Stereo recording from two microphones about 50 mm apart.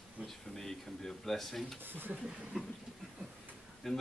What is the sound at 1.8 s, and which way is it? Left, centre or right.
Speech, right.